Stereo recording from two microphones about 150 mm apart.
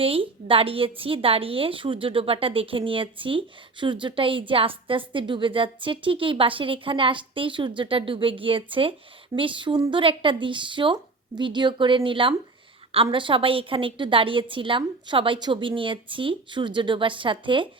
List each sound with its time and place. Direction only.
0.0 s a woman's voice: 35° right (ahead or behind)